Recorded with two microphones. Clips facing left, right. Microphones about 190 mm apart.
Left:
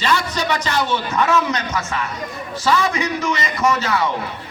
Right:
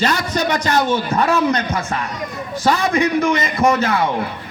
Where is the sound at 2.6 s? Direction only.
55° right (ahead or behind).